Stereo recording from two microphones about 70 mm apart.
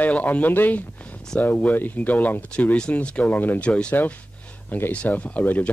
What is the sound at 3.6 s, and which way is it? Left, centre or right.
Speech, centre.